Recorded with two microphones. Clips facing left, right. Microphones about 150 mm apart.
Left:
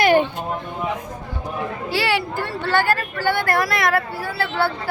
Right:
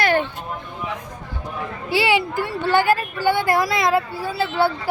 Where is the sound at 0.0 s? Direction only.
15° left (ahead or behind).